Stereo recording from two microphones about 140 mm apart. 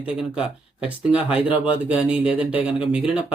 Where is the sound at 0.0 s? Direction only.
5° right (ahead or behind).